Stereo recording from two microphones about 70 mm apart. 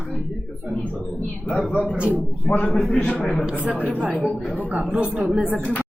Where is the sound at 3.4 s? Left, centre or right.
Centre.